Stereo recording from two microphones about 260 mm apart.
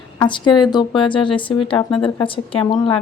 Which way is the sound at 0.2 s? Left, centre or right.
Centre.